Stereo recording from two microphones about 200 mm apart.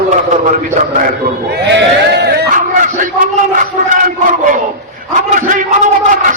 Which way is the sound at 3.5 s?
40° right (ahead or behind).